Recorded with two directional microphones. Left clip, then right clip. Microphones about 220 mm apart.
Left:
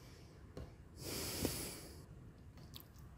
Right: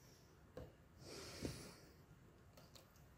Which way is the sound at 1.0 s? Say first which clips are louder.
Left 9 dB; 45° left (ahead or behind).